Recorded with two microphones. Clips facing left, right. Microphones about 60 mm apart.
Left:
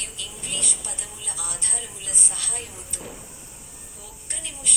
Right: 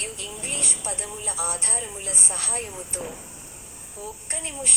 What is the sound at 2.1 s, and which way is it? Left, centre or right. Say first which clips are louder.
Speech: right 2 dB; right.